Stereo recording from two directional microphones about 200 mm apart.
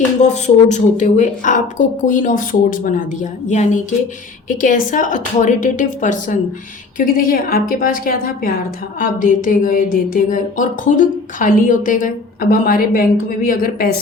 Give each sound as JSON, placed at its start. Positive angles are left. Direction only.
{"t": 0.2, "sound": "a woman's voice", "side_deg": 35}